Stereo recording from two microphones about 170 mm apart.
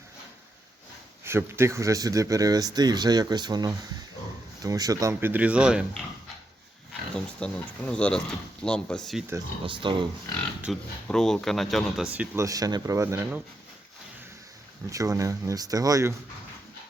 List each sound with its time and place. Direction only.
1.2 s speech: 15° right (ahead or behind)
7.3 s speech: 5° left (ahead or behind)
9.6 s speech: 30° right (ahead or behind)
10.6 s speech: centre (ahead or behind)
12.5 s speech: 20° right (ahead or behind)
14.8 s speech: 20° right (ahead or behind)